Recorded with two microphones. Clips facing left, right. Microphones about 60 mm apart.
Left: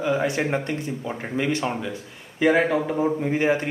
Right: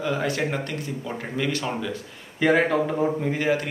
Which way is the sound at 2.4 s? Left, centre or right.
Centre.